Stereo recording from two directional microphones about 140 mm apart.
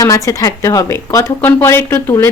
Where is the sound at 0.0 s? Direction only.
25° left (ahead or behind).